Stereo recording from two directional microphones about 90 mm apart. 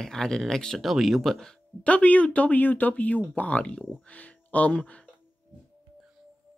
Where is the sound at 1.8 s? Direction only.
15° left (ahead or behind).